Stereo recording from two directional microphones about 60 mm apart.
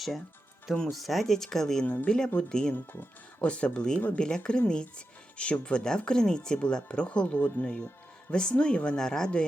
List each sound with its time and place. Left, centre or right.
0.9 s speech: centre
2.7 s speech: left
3.4 s speech: centre